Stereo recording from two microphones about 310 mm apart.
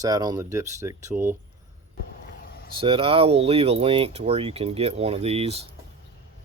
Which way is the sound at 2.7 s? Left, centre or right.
Centre.